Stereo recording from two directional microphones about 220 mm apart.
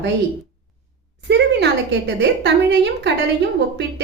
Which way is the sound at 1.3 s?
50° right (ahead or behind).